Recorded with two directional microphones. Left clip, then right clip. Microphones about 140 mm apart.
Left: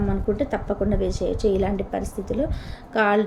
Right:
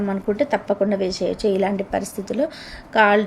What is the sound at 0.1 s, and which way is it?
A woman's voice, 15° right (ahead or behind).